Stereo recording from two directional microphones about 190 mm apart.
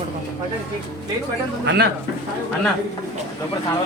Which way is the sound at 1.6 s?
60° right (ahead or behind).